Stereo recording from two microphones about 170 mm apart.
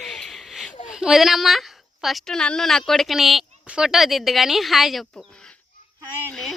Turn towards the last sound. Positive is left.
turn(degrees=0)  # may be behind; listen again after turning